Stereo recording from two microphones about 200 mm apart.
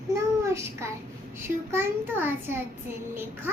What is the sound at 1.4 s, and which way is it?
A child's voice, 10° right (ahead or behind).